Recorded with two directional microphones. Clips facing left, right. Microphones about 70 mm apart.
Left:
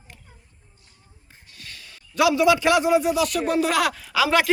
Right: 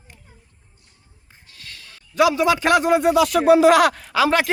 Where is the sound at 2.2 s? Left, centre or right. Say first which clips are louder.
Right 1 dB; right.